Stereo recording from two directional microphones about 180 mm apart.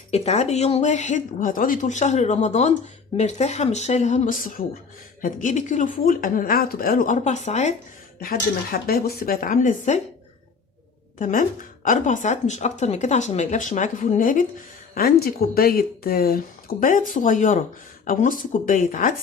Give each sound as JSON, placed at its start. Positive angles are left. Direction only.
{"t": 0.1, "sound": "speech", "side_deg": 35}
{"t": 8.2, "sound": "speech", "side_deg": 55}
{"t": 11.2, "sound": "speech", "side_deg": 50}